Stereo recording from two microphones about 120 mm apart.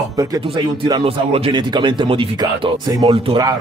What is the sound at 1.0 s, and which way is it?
Speech, 55° right (ahead or behind).